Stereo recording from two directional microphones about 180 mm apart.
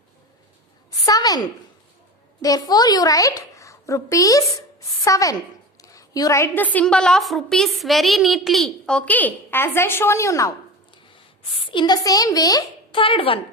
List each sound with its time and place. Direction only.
0.9 s a sound: 20° left (ahead or behind)
2.4 s a woman's voice: 20° left (ahead or behind)
11.6 s a woman's voice: 25° left (ahead or behind)